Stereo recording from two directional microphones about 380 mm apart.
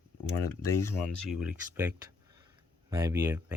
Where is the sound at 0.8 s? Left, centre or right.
Centre.